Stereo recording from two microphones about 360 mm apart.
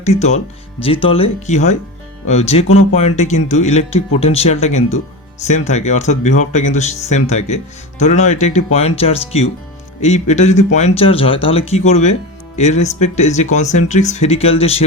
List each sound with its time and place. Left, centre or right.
0.0 s speech: centre